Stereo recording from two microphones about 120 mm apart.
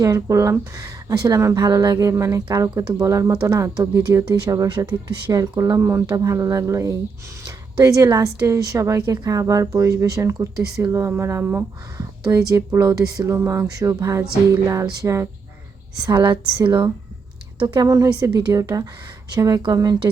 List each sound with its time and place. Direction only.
0.0 s speech: 30° right (ahead or behind)
16.0 s speech: 40° right (ahead or behind)